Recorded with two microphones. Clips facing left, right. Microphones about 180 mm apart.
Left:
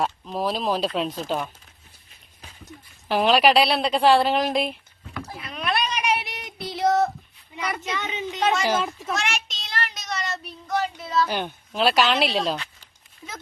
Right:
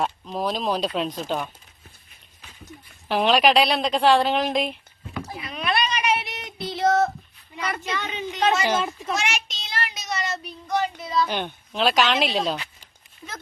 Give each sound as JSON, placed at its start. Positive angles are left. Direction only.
{"t": 0.0, "sound": "a woman's voice", "side_deg": 0}
{"t": 3.1, "sound": "a woman's voice", "side_deg": 0}
{"t": 5.4, "sound": "rowboat", "side_deg": 0}
{"t": 6.1, "sound": "a sound", "side_deg": 10}
{"t": 6.6, "sound": "female singing", "side_deg": 10}
{"t": 7.9, "sound": "speech", "side_deg": 20}
{"t": 8.4, "sound": "a woman's voice", "side_deg": 0}
{"t": 8.7, "sound": "a sound", "side_deg": 0}